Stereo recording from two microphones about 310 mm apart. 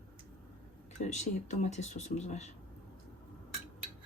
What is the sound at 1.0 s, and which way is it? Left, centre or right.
Speech, left.